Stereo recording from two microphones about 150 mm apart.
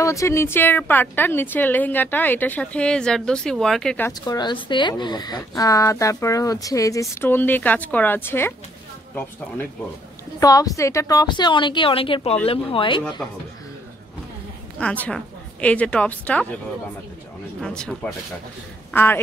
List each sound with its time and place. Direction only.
0.0 s a woman's voice: 20° left (ahead or behind)
4.1 s speech: 30° left (ahead or behind)
10.4 s a woman's voice: 25° left (ahead or behind)
14.8 s a woman's voice: 5° left (ahead or behind)
17.6 s a woman's voice: 5° left (ahead or behind)